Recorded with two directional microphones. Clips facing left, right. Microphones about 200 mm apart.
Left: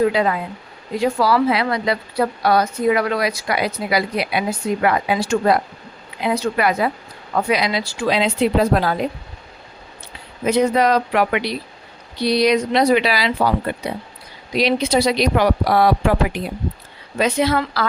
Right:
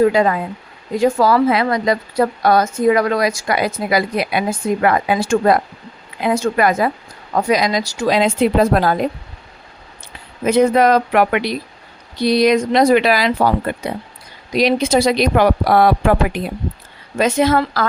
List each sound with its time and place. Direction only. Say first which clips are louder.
0.1 s a woman's voice: right 4 dB; 45° right (ahead or behind)
10.4 s a woman's voice: right 3 dB; 50° right (ahead or behind)